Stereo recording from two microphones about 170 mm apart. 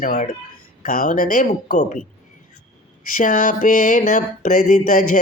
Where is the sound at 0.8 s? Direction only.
55° left (ahead or behind).